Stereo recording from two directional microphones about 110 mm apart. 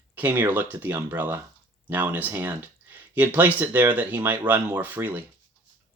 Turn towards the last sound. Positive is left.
turn(degrees=-15)  # may be behind; listen again after turning